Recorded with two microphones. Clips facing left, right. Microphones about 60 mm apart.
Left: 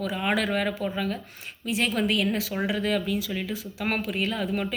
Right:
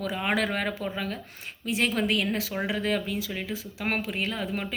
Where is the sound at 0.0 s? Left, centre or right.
Right.